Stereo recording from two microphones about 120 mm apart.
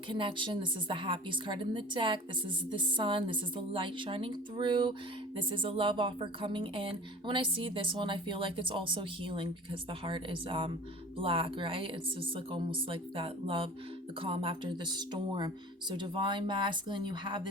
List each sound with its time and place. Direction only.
0.1 s speech: 45° right (ahead or behind)